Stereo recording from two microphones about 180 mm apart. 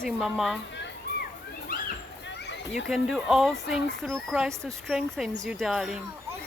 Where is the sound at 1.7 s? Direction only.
50° left (ahead or behind).